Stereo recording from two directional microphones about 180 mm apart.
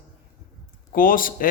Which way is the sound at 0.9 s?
50° left (ahead or behind).